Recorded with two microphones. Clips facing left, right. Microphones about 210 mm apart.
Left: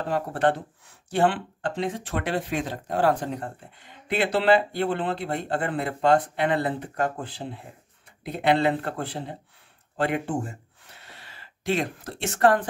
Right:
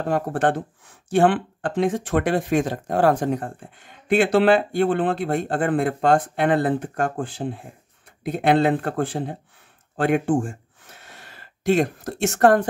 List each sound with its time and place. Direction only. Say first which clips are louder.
0.0 s speech: right 3 dB; 50° right (ahead or behind)